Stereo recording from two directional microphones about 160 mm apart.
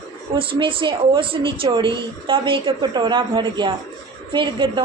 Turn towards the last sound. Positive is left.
turn(degrees=-30)  # may be behind; listen again after turning